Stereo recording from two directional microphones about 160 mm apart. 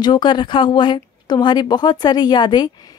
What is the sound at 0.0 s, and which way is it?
Speech, 25° left (ahead or behind).